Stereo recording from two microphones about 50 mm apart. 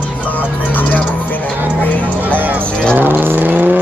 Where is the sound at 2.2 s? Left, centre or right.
Right.